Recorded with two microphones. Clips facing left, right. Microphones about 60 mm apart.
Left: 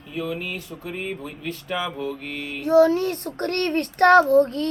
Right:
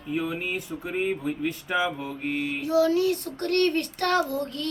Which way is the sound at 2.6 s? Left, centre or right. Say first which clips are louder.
Left 5 dB; left.